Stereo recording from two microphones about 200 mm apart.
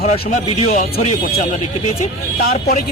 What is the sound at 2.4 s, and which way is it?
Speech, 40° left (ahead or behind).